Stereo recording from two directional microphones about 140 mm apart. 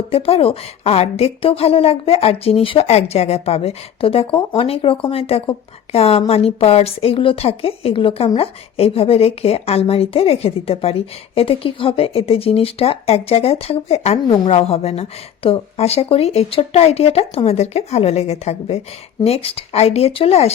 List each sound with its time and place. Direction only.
0.1 s a woman's voice: 45° left (ahead or behind)